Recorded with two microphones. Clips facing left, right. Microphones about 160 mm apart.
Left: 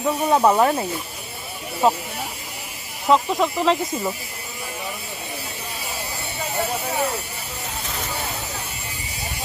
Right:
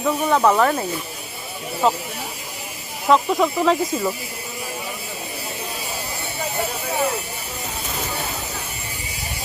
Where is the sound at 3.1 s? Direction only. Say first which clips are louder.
Right 1 dB; centre (ahead or behind).